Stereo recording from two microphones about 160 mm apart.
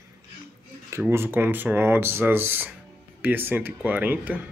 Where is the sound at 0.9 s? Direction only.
15° right (ahead or behind).